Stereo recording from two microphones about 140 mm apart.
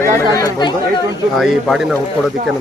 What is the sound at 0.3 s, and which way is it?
Speech, 25° left (ahead or behind).